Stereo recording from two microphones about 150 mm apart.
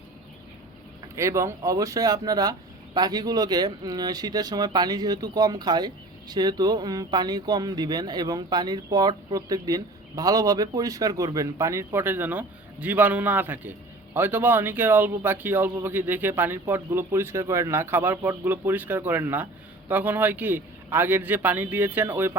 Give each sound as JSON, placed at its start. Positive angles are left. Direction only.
{"t": 1.0, "sound": "a man's voice", "side_deg": -20}